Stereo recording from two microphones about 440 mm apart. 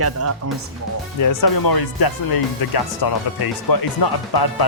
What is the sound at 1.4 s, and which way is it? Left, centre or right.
Speech, left.